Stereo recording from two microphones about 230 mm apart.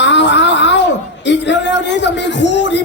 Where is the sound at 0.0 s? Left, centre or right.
Left.